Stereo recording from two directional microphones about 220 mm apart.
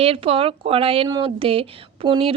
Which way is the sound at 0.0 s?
25° right (ahead or behind).